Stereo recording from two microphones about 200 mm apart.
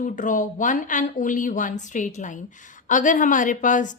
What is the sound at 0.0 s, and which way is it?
A woman's voice, 40° left (ahead or behind).